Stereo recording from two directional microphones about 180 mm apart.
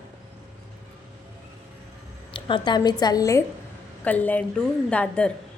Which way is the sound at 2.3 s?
25° left (ahead or behind).